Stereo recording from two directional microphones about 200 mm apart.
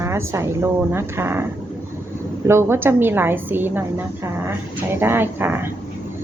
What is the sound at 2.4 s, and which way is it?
A woman's voice, 10° right (ahead or behind).